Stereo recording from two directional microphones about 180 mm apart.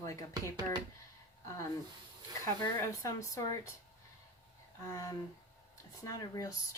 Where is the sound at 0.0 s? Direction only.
20° left (ahead or behind).